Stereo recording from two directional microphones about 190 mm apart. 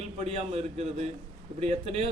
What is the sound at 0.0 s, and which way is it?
A man's voice, 30° right (ahead or behind).